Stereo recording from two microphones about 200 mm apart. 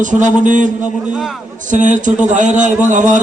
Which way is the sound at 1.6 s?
40° right (ahead or behind).